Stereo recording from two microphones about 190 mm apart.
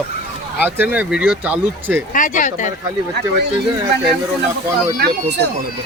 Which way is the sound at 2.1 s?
45° left (ahead or behind).